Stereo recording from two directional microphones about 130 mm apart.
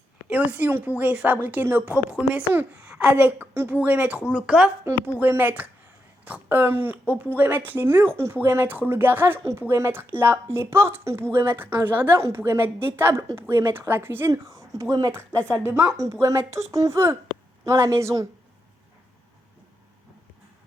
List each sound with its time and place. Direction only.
0.3 s speech: 10° right (ahead or behind)